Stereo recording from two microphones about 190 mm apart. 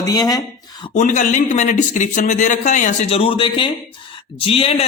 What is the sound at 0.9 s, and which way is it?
A man's voice, 40° left (ahead or behind).